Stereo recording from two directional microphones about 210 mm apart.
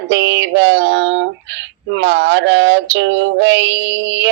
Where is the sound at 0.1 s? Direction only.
60° right (ahead or behind).